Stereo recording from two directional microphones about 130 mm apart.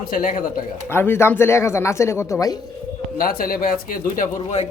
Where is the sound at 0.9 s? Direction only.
20° left (ahead or behind).